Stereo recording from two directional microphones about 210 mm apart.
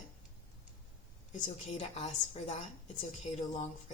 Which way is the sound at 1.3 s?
35° left (ahead or behind).